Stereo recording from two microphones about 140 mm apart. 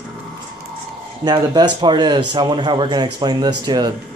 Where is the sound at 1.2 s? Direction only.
30° right (ahead or behind).